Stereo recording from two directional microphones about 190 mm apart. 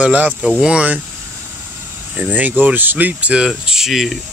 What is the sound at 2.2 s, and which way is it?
Speech, 10° right (ahead or behind).